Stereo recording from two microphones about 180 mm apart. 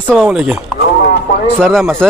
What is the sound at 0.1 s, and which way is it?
Speech, centre (ahead or behind).